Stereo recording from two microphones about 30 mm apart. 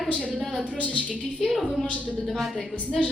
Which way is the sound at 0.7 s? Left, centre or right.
Left.